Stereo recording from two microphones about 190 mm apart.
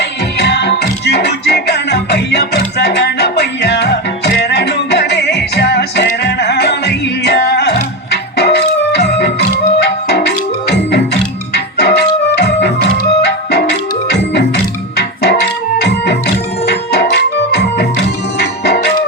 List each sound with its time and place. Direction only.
0.0 s music: 60° left (ahead or behind)